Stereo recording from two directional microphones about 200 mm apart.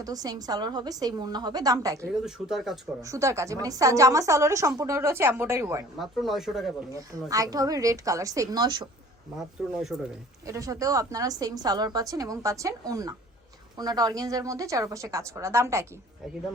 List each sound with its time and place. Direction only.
0.0 s a woman's voice: 20° right (ahead or behind)
2.0 s speech: centre (ahead or behind)
3.0 s a woman's voice: 15° right (ahead or behind)
6.0 s speech: centre (ahead or behind)
6.9 s a woman's voice: 15° right (ahead or behind)
9.4 s speech: centre (ahead or behind)
10.4 s a woman's voice: 15° right (ahead or behind)